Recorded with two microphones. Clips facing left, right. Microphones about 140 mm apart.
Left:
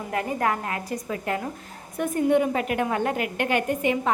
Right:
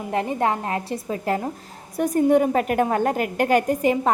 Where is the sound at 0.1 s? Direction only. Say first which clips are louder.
Right 3 dB; 25° right (ahead or behind).